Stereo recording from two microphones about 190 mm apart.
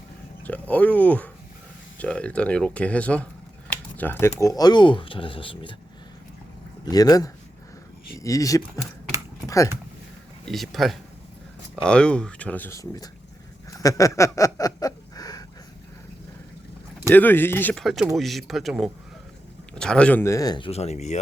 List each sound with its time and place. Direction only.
0.4 s speech: 10° left (ahead or behind); by 5.7 s 30° left (ahead or behind)
6.8 s speech: 20° left (ahead or behind)
10.5 s speech: centre (ahead or behind); by 13.1 s 20° left (ahead or behind)
13.7 s a sound: 15° left (ahead or behind)
17.1 s speech: 10° left (ahead or behind); by 21.2 s 35° left (ahead or behind)